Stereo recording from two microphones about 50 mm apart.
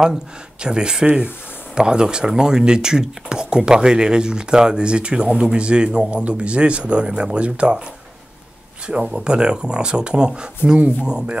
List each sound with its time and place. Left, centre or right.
0.6 s speech: centre
8.8 s speech: centre